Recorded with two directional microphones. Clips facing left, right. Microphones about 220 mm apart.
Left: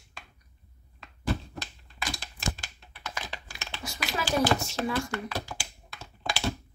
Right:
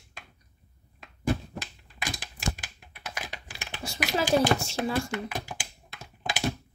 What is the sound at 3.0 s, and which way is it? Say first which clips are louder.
Computer keyboard: even; 15° right (ahead or behind).